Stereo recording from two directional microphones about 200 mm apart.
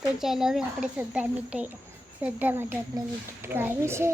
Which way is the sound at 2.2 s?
10° right (ahead or behind).